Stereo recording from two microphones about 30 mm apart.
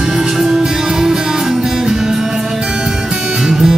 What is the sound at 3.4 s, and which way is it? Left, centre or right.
Music, centre.